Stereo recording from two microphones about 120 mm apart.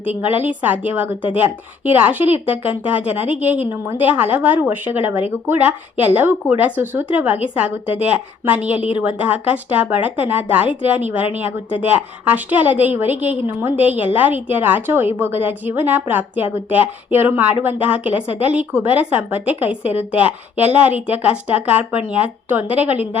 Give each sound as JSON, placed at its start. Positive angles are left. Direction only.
{"t": 0.0, "sound": "a woman's voice", "side_deg": -15}